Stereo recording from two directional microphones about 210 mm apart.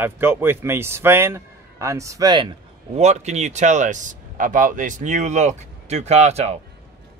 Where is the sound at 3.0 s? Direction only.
35° right (ahead or behind).